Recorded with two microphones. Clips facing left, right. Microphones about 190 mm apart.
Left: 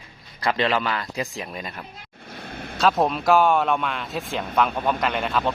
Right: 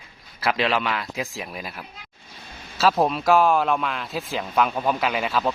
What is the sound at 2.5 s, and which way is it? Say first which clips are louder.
Vehicle: left 8 dB; 60° left (ahead or behind).